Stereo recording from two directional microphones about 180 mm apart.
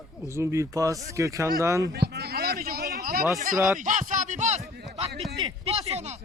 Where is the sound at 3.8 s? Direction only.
45° right (ahead or behind).